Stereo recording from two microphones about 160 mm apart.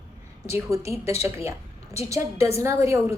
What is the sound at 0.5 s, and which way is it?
A woman's voice, 20° right (ahead or behind).